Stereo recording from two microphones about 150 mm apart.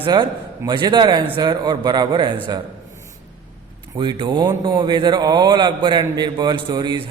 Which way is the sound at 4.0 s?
30° right (ahead or behind).